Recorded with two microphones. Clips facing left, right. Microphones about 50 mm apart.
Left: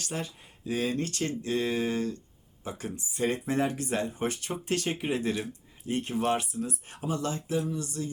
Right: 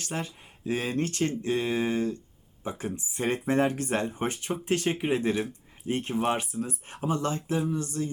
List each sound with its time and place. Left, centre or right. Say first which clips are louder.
0.0 s speech: right 1 dB; right
6.1 s speech: even; centre
6.4 s speech: right 1 dB; right